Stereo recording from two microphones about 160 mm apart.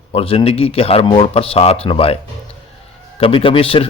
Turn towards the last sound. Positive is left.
turn(degrees=35)  # may be behind; listen again after turning